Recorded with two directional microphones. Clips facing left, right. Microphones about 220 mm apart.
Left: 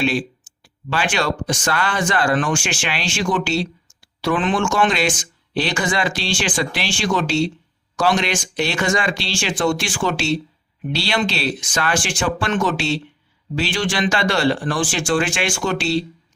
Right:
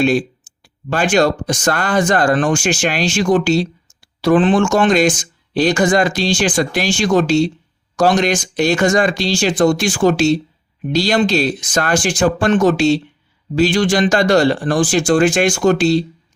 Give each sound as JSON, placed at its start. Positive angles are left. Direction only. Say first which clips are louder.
{"t": 0.0, "sound": "speech", "louder": "right 6 dB", "side_deg": -45}